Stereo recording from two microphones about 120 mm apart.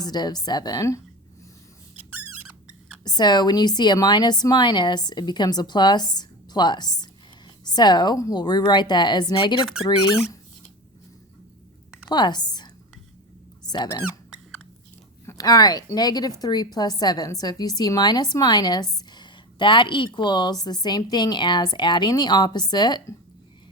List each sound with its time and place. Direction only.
0.0 s a woman's voice: 35° left (ahead or behind)
2.0 s a sound: 15° right (ahead or behind)
3.0 s a woman's voice: 35° left (ahead or behind)
12.0 s a woman's voice: 40° left (ahead or behind)
15.3 s a woman's voice: 30° left (ahead or behind)